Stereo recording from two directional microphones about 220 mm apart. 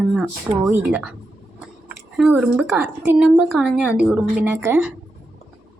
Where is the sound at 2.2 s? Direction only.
Centre (ahead or behind).